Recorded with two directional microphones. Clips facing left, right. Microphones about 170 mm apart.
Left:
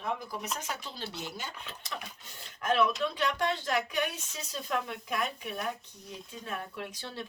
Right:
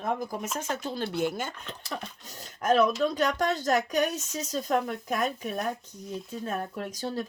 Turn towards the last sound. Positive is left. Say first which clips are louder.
# right 7 dB
turn(degrees=-40)  # may be behind; listen again after turning